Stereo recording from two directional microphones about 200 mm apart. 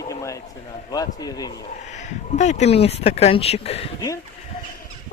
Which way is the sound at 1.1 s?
20° left (ahead or behind).